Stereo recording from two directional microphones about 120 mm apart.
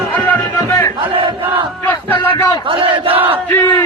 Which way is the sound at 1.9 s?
15° left (ahead or behind).